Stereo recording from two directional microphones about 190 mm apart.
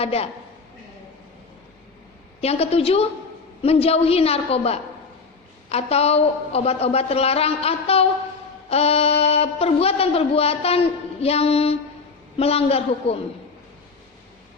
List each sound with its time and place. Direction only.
0.0 s speech: 30° left (ahead or behind)
2.4 s speech: 30° left (ahead or behind)